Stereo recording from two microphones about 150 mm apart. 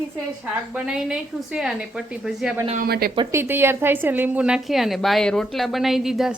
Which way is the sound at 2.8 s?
85° right.